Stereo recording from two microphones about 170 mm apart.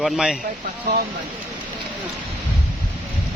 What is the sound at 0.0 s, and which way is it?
Speech, 5° right (ahead or behind).